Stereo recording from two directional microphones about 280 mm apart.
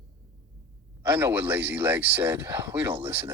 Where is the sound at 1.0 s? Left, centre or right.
Centre.